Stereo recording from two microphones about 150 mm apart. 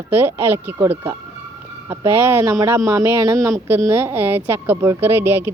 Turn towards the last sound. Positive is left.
turn(degrees=-15)  # may be behind; listen again after turning